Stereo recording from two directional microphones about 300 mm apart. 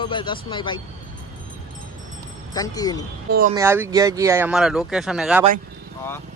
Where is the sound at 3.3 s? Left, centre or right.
Right.